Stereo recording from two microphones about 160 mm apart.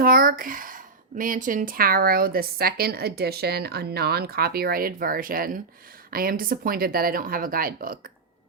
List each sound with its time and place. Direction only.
0.0 s speech: 65° right (ahead or behind)